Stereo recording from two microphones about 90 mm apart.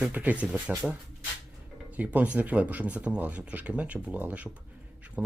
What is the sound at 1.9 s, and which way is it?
Speech, 15° right (ahead or behind).